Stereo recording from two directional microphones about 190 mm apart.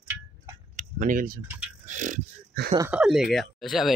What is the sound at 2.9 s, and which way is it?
Speech, 5° right (ahead or behind).